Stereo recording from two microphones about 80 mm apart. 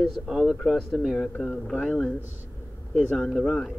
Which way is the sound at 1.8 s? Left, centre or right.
Centre.